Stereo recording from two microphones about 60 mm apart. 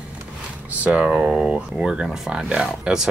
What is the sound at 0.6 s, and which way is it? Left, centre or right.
Speech, right.